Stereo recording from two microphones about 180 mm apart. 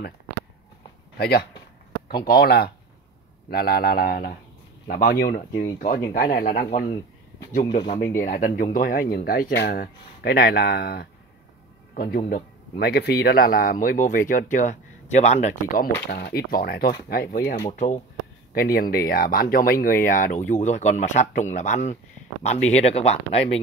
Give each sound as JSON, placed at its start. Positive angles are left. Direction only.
{"t": 1.1, "sound": "speech", "side_deg": 60}
{"t": 7.7, "sound": "speech", "side_deg": 35}
{"t": 8.2, "sound": "speech", "side_deg": 50}
{"t": 11.9, "sound": "speech", "side_deg": 55}
{"t": 16.1, "sound": "speech", "side_deg": 60}
{"t": 17.6, "sound": "speech", "side_deg": 40}
{"t": 18.5, "sound": "speech", "side_deg": 55}